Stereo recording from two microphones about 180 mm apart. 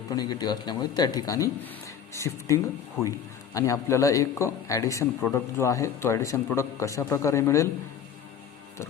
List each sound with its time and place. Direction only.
0.1 s speech: 20° left (ahead or behind)